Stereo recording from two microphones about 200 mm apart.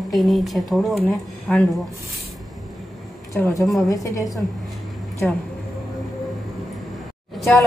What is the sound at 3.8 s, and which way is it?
Speech, 15° left (ahead or behind).